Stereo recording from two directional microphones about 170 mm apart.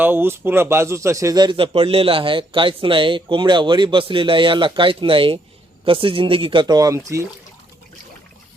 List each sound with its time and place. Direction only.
0.0 s speech: 10° right (ahead or behind)